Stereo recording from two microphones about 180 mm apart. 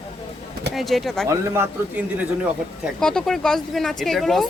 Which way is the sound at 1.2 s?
15° right (ahead or behind).